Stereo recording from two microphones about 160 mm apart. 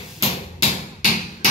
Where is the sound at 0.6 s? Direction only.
50° left (ahead or behind).